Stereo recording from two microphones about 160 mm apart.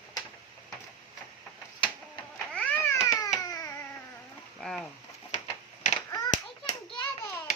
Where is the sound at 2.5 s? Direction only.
10° left (ahead or behind).